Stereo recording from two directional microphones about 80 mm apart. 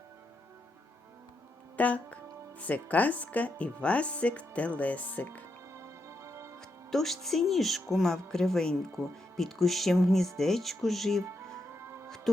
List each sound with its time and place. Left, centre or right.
1.7 s speech: centre
5.7 s music: right
6.9 s speech: centre
11.5 s music: right